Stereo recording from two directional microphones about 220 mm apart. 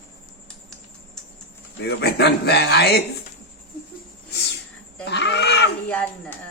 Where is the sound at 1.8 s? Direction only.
50° left (ahead or behind).